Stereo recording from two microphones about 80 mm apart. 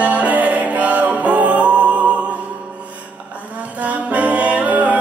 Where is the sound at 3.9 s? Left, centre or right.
Centre.